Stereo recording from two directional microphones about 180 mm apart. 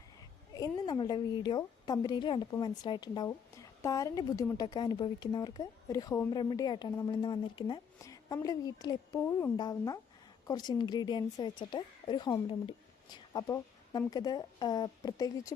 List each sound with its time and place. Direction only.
0.5 s a woman's voice: 20° left (ahead or behind)